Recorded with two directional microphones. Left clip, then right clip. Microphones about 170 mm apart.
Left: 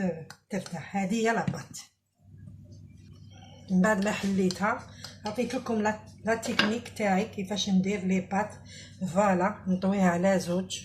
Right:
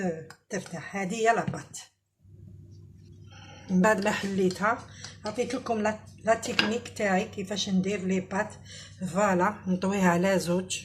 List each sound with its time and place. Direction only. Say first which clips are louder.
0.5 s chopping: even; 35° right (ahead or behind)
3.8 s chopping: right 3 dB; 35° right (ahead or behind)